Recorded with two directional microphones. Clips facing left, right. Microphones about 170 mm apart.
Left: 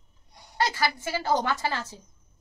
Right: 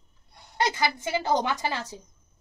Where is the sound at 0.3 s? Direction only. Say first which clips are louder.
Left 1 dB; 15° left (ahead or behind).